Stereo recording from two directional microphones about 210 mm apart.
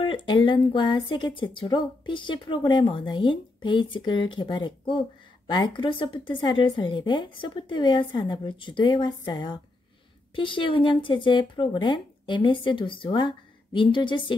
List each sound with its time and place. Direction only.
0.0 s speech: 25° left (ahead or behind)